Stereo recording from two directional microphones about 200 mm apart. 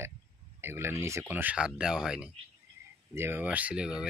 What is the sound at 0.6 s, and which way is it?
Speech, 10° right (ahead or behind).